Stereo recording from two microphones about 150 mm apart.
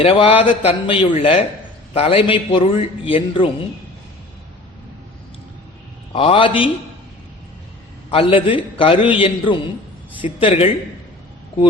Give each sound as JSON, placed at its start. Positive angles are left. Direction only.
{"t": 0.0, "sound": "a man's voice", "side_deg": 40}
{"t": 6.1, "sound": "a man's voice", "side_deg": 35}
{"t": 8.1, "sound": "a man's voice", "side_deg": 40}